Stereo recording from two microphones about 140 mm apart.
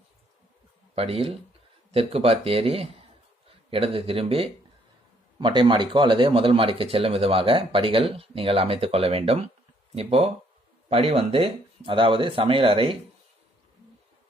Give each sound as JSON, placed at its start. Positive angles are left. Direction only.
{"t": 0.9, "sound": "a man's voice", "side_deg": -45}